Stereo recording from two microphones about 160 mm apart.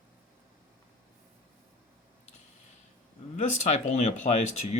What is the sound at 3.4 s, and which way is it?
Speech, 45° left (ahead or behind).